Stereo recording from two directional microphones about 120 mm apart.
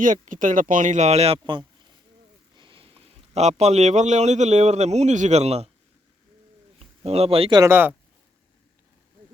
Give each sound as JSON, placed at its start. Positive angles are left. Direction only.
{"t": 0.0, "sound": "speech", "side_deg": -90}
{"t": 2.6, "sound": "a man's voice", "side_deg": -45}
{"t": 6.7, "sound": "a sound", "side_deg": -55}
{"t": 7.7, "sound": "speech", "side_deg": -15}